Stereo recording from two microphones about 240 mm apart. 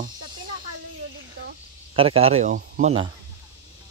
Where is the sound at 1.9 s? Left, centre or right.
Right.